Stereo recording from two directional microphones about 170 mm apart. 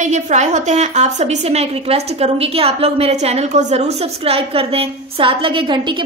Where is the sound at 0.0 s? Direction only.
45° right (ahead or behind).